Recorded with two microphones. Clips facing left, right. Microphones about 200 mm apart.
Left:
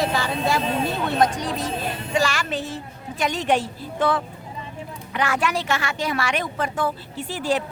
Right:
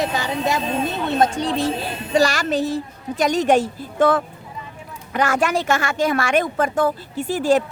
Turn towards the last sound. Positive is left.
turn(degrees=-45)  # may be behind; listen again after turning